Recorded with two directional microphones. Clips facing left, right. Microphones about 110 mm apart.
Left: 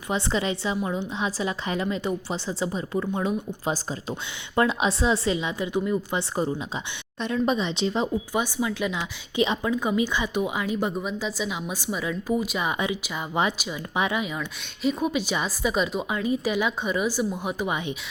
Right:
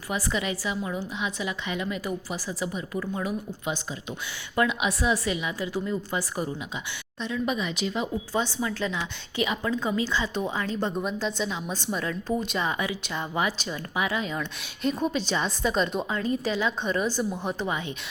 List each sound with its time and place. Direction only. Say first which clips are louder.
0.1 s a woman's voice: left 3 dB; 30° left (ahead or behind)
8.3 s a woman's voice: left 2 dB; 15° left (ahead or behind)
13.4 s a woman's voice: left 4 dB; 20° left (ahead or behind)
14.2 s a woman's voice: left 1 dB; 5° left (ahead or behind)